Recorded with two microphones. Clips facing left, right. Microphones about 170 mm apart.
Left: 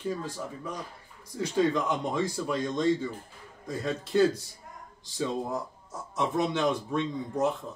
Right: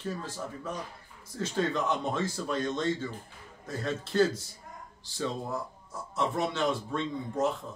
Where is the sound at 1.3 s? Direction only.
15° left (ahead or behind).